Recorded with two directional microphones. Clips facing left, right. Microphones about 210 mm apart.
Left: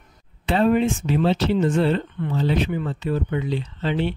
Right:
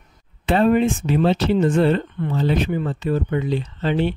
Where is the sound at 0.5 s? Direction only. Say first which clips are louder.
Right 2 dB; 55° right (ahead or behind).